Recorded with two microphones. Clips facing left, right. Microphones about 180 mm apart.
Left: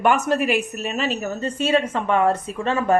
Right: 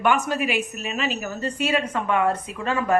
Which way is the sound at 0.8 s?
35° left (ahead or behind).